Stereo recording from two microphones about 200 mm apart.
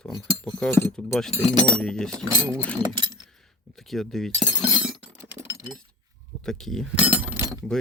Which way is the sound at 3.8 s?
Centre (ahead or behind).